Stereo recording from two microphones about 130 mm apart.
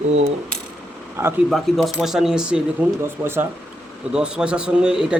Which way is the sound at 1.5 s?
Centre (ahead or behind).